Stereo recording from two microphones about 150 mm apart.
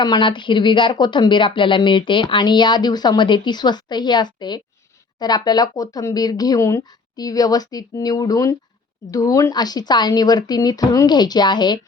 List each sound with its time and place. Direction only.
0.0 s speech: 30° left (ahead or behind)